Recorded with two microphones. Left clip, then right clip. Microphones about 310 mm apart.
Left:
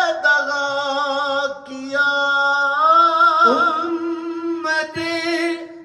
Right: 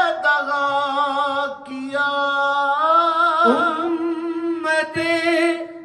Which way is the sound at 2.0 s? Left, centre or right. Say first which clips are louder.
Left 2 dB; right.